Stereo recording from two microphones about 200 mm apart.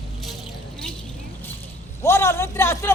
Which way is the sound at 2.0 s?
15° left (ahead or behind).